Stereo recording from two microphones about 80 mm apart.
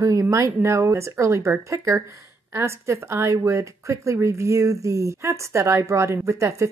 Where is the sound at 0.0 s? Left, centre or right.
Right.